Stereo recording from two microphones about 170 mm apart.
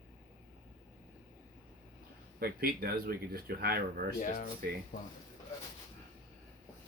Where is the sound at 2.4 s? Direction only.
65° right (ahead or behind).